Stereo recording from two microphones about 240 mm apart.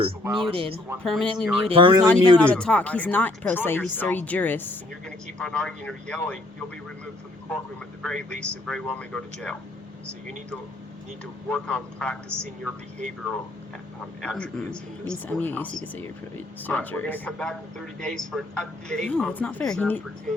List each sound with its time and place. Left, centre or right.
0.4 s speech: right
1.0 s a man's voice: centre
1.6 s speech: right
2.4 s speech: centre
8.0 s a man's voice: centre
11.4 s a man's voice: centre
14.2 s a man's voice: centre